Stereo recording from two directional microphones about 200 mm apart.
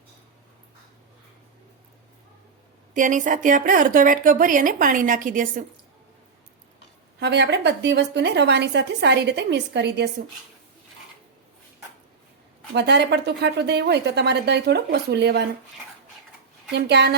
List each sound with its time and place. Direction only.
2.9 s a woman's voice: 40° right (ahead or behind)
7.2 s a woman's voice: 55° right (ahead or behind)
12.7 s a woman's voice: 55° right (ahead or behind)
16.7 s a woman's voice: 55° right (ahead or behind)